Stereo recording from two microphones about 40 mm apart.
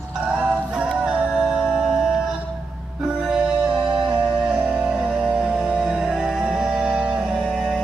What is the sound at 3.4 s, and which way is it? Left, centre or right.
Music, right.